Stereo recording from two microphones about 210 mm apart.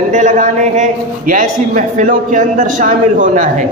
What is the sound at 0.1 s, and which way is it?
A man's voice, 35° right (ahead or behind).